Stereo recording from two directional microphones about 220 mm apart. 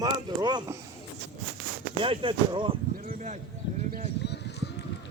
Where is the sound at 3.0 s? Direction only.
35° right (ahead or behind).